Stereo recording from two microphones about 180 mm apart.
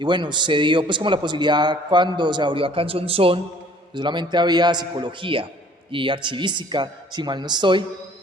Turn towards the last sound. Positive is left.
turn(degrees=-25)  # may be behind; listen again after turning